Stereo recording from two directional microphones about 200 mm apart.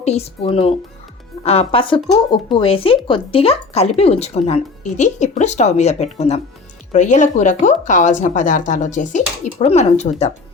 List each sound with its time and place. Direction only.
0.0 s speech: 30° left (ahead or behind)